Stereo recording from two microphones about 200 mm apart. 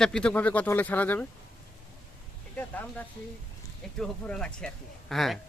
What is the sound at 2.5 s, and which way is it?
Speech, 10° left (ahead or behind).